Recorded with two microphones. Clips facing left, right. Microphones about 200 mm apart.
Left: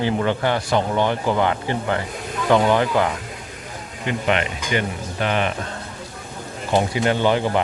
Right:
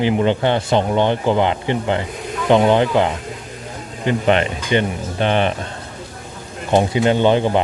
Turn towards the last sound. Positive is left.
turn(degrees=-20)  # may be behind; listen again after turning